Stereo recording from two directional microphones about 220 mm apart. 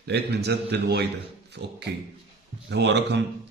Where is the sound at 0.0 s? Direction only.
50° right (ahead or behind).